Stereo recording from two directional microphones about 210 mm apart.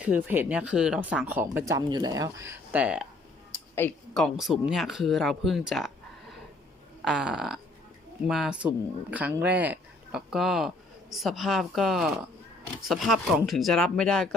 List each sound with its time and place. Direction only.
0.0 s speech: 10° right (ahead or behind)
3.8 s speech: 5° left (ahead or behind)
7.0 s speech: centre (ahead or behind)